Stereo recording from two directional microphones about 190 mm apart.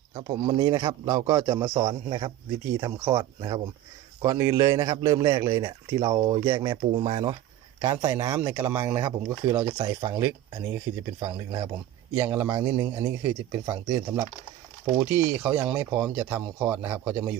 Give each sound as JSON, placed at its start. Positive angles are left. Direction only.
{"t": 0.1, "sound": "a man's voice", "side_deg": -25}
{"t": 7.8, "sound": "speech", "side_deg": -15}